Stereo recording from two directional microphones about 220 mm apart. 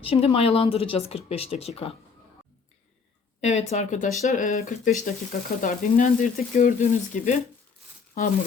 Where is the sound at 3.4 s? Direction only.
30° left (ahead or behind).